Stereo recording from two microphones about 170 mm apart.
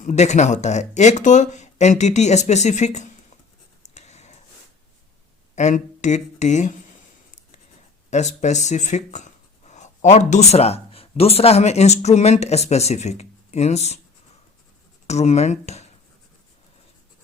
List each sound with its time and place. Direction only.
0.0 s speech: 45° left (ahead or behind)
3.8 s a sound: 40° left (ahead or behind)
5.5 s speech: 45° left (ahead or behind)
8.1 s speech: 45° left (ahead or behind)
15.0 s speech: 40° left (ahead or behind)